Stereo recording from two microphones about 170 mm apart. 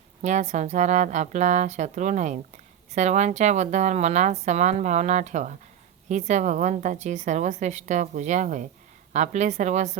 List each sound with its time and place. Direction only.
0.2 s a woman's voice: 45° right (ahead or behind)